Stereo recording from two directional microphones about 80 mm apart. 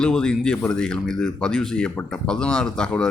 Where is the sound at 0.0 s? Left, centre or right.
Centre.